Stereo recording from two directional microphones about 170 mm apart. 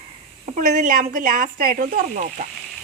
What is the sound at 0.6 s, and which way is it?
Speech, 50° right (ahead or behind).